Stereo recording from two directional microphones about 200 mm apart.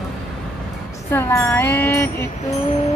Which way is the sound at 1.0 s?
10° left (ahead or behind).